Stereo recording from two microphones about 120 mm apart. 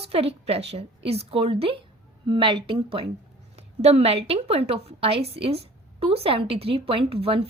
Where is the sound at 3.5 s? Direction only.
65° right (ahead or behind).